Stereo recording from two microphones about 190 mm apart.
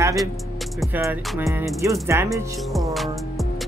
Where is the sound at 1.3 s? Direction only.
10° right (ahead or behind).